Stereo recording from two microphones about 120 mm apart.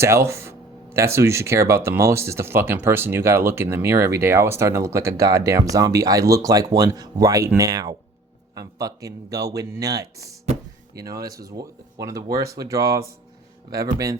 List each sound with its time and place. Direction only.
0.0 s speech: 20° right (ahead or behind)